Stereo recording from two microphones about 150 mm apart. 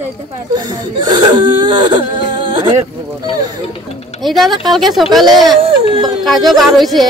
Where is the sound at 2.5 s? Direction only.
35° right (ahead or behind).